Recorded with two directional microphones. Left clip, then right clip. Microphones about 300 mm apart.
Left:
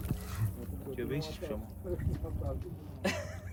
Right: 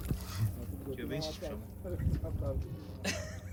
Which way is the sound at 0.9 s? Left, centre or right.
Left.